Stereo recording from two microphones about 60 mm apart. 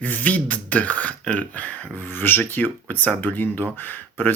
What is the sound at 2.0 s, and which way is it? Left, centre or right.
Speech, left.